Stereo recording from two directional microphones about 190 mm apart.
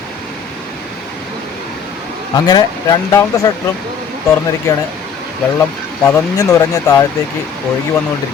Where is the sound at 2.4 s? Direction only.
20° left (ahead or behind).